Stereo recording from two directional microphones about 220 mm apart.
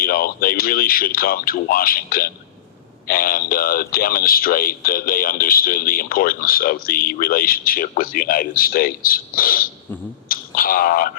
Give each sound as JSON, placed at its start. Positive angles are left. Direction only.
{"t": 0.0, "sound": "speech", "side_deg": 40}